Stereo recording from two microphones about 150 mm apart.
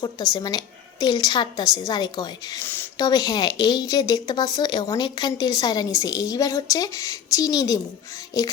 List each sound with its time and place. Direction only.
0.0 s speech: 30° left (ahead or behind)